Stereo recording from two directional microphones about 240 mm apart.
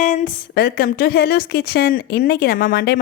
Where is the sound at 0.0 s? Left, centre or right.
Left.